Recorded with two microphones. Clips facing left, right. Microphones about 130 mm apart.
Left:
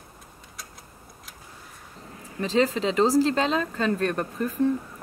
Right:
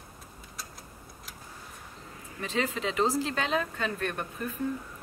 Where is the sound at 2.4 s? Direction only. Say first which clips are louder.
Left 8 dB; 35° left (ahead or behind).